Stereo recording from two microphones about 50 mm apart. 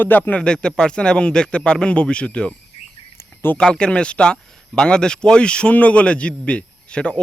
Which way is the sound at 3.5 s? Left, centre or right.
Centre.